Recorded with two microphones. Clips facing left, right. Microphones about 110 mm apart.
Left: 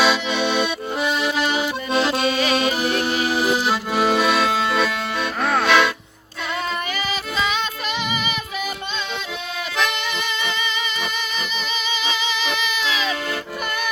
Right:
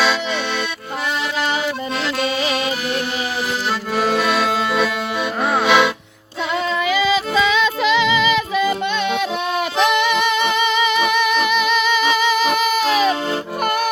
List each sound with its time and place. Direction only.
0.0 s accordion: 10° left (ahead or behind)
1.9 s accordion: 20° left (ahead or behind)
2.6 s music: 25° left (ahead or behind)
3.5 s accordion: 5° left (ahead or behind)
5.4 s music: 15° right (ahead or behind)
7.4 s music: 90° right
9.8 s music: 65° right (ahead or behind)